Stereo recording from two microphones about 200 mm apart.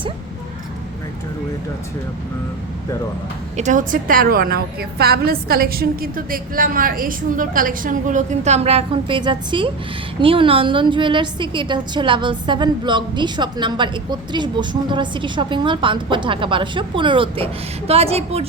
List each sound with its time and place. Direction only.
3.6 s a woman's voice: 40° right (ahead or behind)